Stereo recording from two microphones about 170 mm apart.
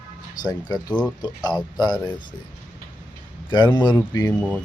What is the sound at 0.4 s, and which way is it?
Speech, 25° left (ahead or behind).